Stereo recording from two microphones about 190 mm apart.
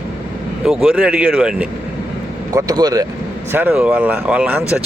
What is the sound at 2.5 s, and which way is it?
Speech, 20° right (ahead or behind).